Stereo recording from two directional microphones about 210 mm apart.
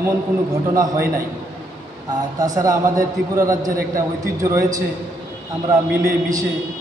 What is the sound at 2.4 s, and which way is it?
A man's voice, 15° right (ahead or behind).